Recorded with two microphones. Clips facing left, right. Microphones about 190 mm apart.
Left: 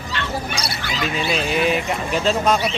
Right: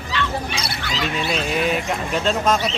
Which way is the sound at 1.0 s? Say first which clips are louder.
Left 2 dB; centre (ahead or behind).